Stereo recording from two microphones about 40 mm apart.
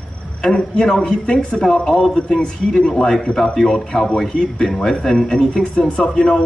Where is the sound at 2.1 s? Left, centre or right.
Left.